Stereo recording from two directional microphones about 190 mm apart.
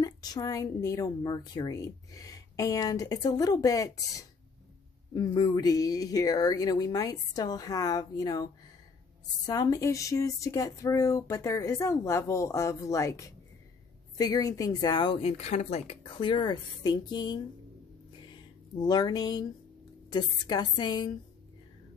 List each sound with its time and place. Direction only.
0.0 s a woman's voice: 20° left (ahead or behind)
9.5 s a woman's voice: 20° left (ahead or behind)